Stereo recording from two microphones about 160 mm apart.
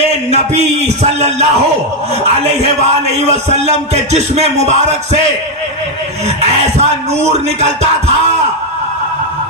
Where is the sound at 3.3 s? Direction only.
45° right (ahead or behind).